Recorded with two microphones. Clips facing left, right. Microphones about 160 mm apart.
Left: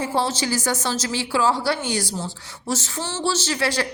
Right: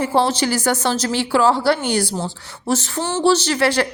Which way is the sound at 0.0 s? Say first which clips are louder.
Right 5 dB; 65° right (ahead or behind).